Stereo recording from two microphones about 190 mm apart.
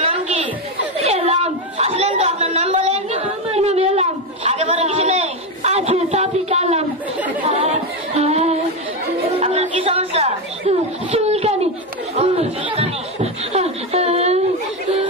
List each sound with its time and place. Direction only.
1.0 s chatter: 35° right (ahead or behind)
7.4 s music: 35° right (ahead or behind)
9.4 s chatter: 35° right (ahead or behind)
12.7 s chuckle: 30° right (ahead or behind)